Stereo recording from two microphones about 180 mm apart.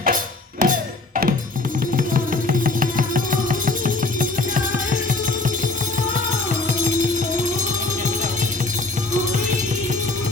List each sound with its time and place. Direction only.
0.6 s music: 50° right (ahead or behind)
6.7 s music: 45° right (ahead or behind)